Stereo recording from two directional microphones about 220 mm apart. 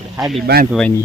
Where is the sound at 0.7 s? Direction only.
5° left (ahead or behind).